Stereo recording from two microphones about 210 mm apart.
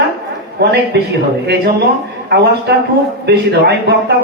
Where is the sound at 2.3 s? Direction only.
50° right (ahead or behind).